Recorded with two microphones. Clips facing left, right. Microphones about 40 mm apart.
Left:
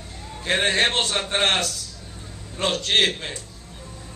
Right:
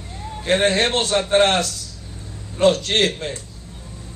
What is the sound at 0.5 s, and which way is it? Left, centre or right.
Speech, left.